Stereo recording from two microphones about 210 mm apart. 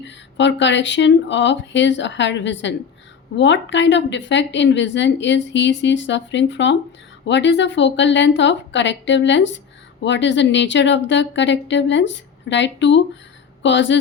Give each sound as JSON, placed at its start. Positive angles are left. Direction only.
{"t": 0.0, "sound": "a woman's voice", "side_deg": 60}